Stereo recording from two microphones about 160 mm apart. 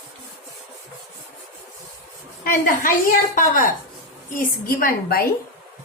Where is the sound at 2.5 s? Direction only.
60° left (ahead or behind).